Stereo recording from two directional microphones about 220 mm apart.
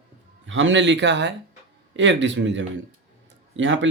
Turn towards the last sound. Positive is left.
turn(degrees=-60)  # may be behind; listen again after turning